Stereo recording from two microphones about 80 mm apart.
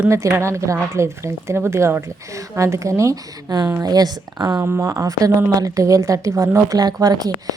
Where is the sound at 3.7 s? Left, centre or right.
Right.